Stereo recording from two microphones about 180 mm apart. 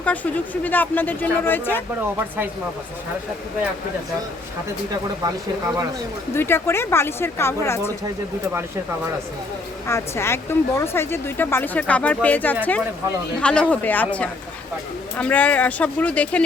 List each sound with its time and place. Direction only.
0.0 s speech: 10° left (ahead or behind)
5.2 s speech: 20° right (ahead or behind)
6.3 s speech: 15° left (ahead or behind)
9.8 s speech: 15° left (ahead or behind)